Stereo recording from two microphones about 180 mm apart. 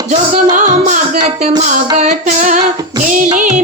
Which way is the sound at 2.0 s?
45° right (ahead or behind).